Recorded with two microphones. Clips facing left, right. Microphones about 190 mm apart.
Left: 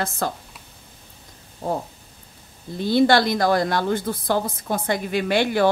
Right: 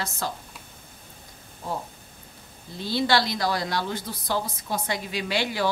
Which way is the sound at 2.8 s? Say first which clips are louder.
Left 7 dB; 55° left (ahead or behind).